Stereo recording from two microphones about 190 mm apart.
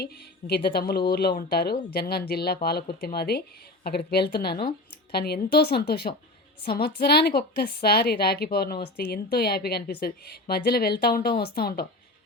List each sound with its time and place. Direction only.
0.0 s a woman's voice: 55° left (ahead or behind)